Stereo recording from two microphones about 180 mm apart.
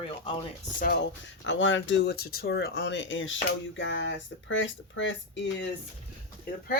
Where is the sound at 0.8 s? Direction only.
65° left (ahead or behind); by 5.7 s 85° left.